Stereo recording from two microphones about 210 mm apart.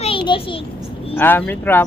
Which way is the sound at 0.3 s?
25° left (ahead or behind).